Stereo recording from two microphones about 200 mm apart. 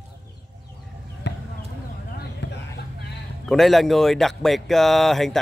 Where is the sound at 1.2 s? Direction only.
60° left (ahead or behind).